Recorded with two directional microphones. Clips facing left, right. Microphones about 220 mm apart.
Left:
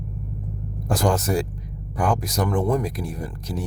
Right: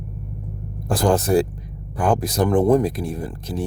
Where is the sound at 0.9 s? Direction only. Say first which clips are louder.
Right 5 dB; 30° right (ahead or behind).